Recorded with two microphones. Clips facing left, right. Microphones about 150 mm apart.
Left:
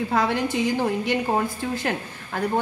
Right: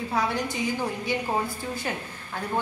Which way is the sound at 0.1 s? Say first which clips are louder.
Left 3 dB; 90° left.